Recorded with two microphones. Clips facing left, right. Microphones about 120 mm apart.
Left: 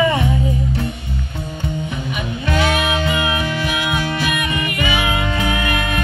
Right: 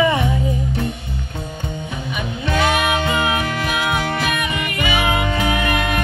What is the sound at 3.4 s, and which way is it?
Music, 50° right (ahead or behind).